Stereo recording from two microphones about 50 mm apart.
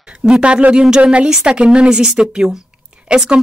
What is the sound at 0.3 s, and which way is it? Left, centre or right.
A woman's voice, right.